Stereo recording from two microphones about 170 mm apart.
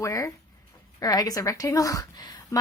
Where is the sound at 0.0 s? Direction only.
20° left (ahead or behind).